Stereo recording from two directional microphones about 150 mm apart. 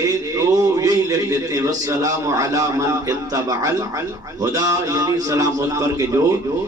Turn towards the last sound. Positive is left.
turn(degrees=-20)  # may be behind; listen again after turning